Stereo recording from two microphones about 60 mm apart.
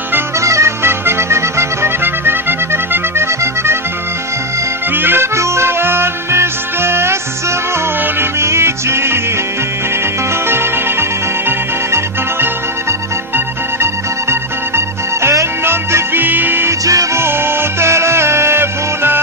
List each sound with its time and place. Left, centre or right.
0.4 s music: right
4.9 s music: right
8.2 s music: right
10.5 s music: right
15.2 s music: right
16.8 s music: right
17.2 s music: right